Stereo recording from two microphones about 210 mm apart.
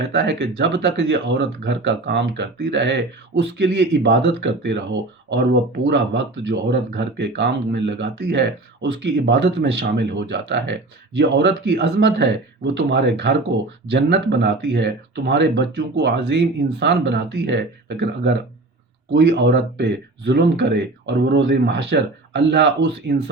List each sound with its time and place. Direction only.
0.1 s speech: 55° right (ahead or behind)